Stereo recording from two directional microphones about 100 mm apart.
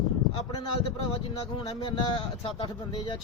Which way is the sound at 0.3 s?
65° left (ahead or behind).